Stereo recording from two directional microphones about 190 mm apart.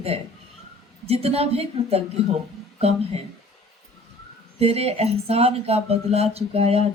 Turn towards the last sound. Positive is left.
turn(degrees=-30)  # may be behind; listen again after turning